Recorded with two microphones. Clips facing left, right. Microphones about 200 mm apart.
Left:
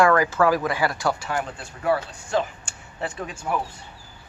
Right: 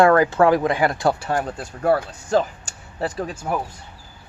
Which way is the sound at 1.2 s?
40° right (ahead or behind).